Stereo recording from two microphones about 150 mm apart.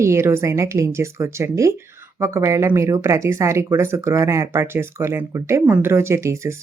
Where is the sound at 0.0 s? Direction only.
20° right (ahead or behind).